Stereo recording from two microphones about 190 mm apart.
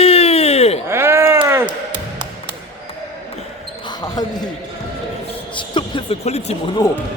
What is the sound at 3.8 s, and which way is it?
Basketball bounce, 20° left (ahead or behind).